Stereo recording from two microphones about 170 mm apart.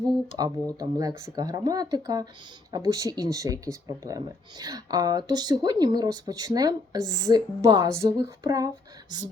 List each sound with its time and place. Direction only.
0.0 s speech: 25° right (ahead or behind)